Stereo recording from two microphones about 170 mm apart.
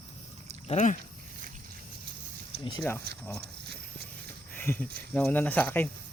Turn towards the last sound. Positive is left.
turn(degrees=10)  # may be behind; listen again after turning